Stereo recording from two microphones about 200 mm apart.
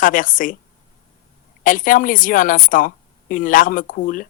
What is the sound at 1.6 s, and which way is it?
Speech, 40° left (ahead or behind).